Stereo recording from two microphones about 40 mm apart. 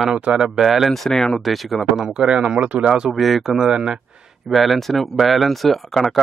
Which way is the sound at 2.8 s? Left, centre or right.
Right.